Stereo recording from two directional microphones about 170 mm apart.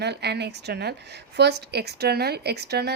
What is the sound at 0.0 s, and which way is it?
A woman's voice, 75° right (ahead or behind).